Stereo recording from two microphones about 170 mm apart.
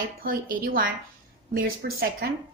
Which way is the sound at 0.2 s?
60° right (ahead or behind).